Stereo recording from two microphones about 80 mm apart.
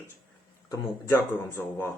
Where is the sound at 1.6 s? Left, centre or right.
Left.